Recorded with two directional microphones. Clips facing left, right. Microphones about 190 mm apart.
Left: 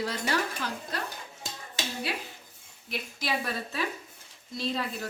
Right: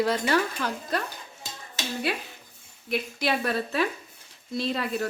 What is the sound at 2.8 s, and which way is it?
A woman's voice, 60° right (ahead or behind).